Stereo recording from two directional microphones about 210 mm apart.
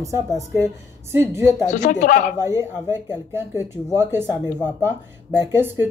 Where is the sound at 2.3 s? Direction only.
15° right (ahead or behind).